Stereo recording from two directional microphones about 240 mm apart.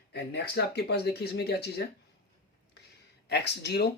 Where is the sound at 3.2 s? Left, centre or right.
Left.